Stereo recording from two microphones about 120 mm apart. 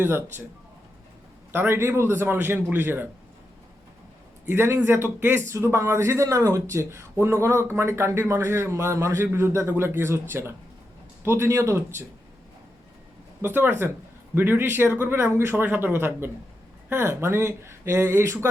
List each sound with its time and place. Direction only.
1.5 s speech: 20° right (ahead or behind)
4.4 s speech: 20° right (ahead or behind)
13.4 s speech: 20° right (ahead or behind)